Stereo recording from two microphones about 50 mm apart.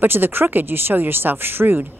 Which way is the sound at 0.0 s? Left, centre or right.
Right.